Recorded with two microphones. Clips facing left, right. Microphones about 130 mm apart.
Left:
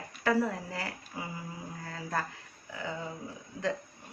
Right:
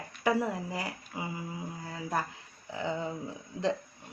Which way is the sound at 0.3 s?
15° right (ahead or behind).